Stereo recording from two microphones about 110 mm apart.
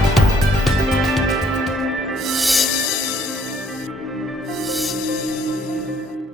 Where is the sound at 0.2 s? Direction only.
Centre (ahead or behind).